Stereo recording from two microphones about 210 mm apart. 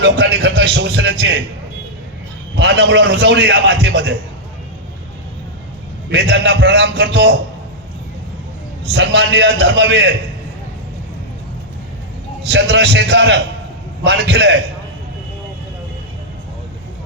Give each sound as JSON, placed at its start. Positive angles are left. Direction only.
{"t": 0.0, "sound": "a man's voice", "side_deg": -55}
{"t": 2.6, "sound": "a man's voice", "side_deg": -55}
{"t": 6.1, "sound": "a man's voice", "side_deg": -55}
{"t": 8.9, "sound": "a man's voice", "side_deg": -55}
{"t": 12.5, "sound": "a man's voice", "side_deg": -55}